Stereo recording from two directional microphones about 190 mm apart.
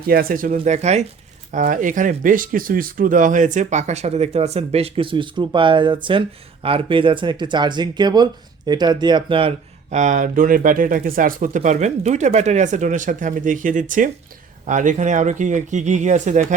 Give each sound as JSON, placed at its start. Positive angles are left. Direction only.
{"t": 0.1, "sound": "speech", "side_deg": -50}